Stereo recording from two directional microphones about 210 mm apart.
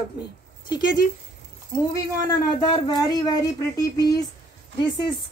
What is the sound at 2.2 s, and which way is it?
Speech, 20° left (ahead or behind).